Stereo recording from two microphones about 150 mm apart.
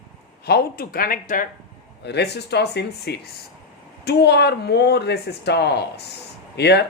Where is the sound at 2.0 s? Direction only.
90° left.